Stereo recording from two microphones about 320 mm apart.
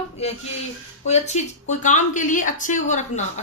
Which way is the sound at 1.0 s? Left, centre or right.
Left.